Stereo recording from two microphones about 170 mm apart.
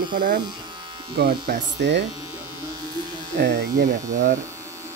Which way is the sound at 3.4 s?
70° right (ahead or behind).